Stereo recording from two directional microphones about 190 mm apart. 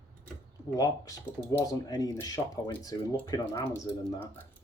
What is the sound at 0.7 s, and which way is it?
Speech, 20° left (ahead or behind).